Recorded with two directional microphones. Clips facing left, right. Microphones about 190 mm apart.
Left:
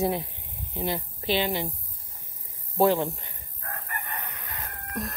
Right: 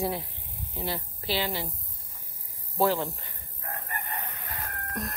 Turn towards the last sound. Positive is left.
turn(degrees=0)  # may be behind; listen again after turning